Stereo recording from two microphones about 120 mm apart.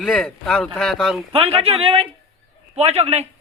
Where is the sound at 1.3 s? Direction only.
50° right (ahead or behind).